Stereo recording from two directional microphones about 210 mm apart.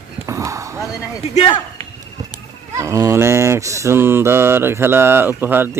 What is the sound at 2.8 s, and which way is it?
Mantra, 15° right (ahead or behind).